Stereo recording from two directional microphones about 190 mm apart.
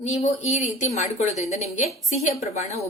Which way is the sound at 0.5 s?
40° left (ahead or behind).